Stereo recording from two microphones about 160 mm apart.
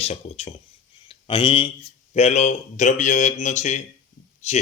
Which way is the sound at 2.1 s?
45° left (ahead or behind).